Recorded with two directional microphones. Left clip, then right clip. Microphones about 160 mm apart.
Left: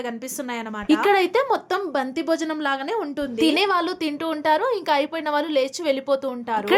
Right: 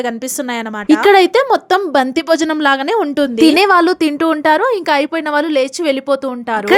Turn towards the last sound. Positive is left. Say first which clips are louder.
# right 7 dB
turn(degrees=-45)  # may be behind; listen again after turning